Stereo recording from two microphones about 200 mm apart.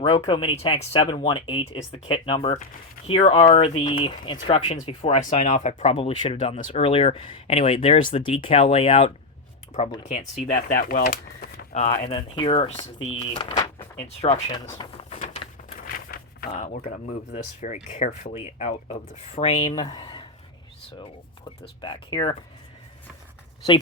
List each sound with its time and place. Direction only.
0.0 s speech: 20° left (ahead or behind)
10.7 s speech: 50° left (ahead or behind)
12.0 s speech: 25° left (ahead or behind)
15.7 s speech: 45° left (ahead or behind)
19.7 s speech: 20° left (ahead or behind)
21.6 s speech: 25° left (ahead or behind)